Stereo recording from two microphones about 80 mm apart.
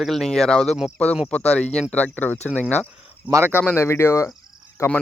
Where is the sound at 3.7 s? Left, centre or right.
Left.